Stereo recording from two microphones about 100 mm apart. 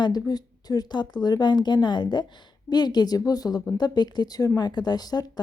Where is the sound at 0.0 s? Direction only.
40° left (ahead or behind).